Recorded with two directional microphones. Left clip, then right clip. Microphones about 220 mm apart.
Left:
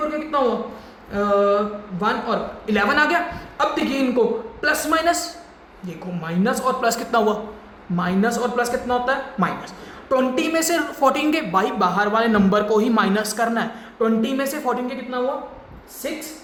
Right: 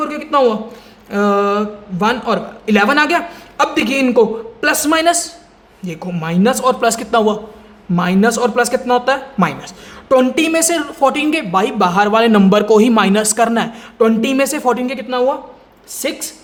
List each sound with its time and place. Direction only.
0.3 s a man's voice: 55° right (ahead or behind)